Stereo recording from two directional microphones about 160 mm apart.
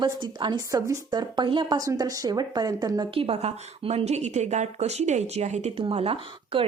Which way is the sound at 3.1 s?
35° right (ahead or behind).